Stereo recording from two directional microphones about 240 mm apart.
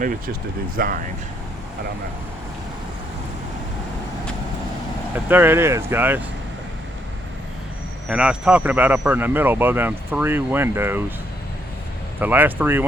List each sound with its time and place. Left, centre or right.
0.8 s speech: right
5.1 s speech: centre
8.0 s speech: centre
12.2 s speech: centre